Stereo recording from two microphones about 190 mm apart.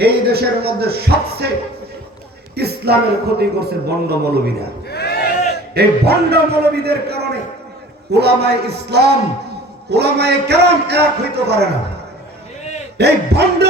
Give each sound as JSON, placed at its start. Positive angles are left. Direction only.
{"t": 0.0, "sound": "a man's voice", "side_deg": -55}
{"t": 2.6, "sound": "a man's voice", "side_deg": -55}
{"t": 4.9, "sound": "a sound", "side_deg": 55}
{"t": 5.7, "sound": "a man's voice", "side_deg": -55}
{"t": 13.0, "sound": "a man's voice", "side_deg": -60}